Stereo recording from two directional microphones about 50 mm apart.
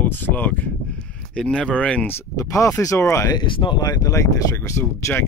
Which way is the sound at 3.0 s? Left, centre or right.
Left.